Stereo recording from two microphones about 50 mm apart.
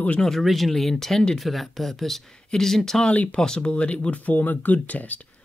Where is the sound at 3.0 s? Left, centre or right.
Left.